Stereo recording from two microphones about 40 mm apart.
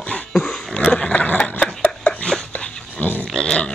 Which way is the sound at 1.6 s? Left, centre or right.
Left.